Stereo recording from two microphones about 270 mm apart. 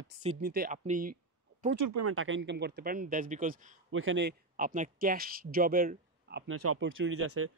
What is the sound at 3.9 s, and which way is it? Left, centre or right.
Speech, right.